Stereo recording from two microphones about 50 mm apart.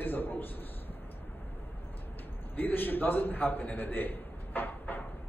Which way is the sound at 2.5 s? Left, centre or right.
Left.